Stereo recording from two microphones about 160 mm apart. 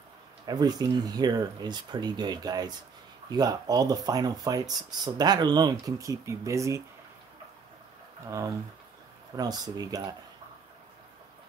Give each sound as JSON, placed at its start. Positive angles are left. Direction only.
{"t": 0.5, "sound": "speech", "side_deg": -25}
{"t": 8.3, "sound": "speech", "side_deg": -20}